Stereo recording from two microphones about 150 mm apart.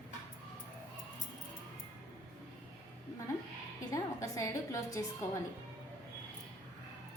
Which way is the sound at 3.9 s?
20° left (ahead or behind).